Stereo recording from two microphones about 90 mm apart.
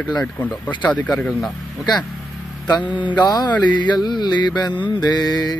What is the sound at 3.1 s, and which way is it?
Speech, 50° left (ahead or behind).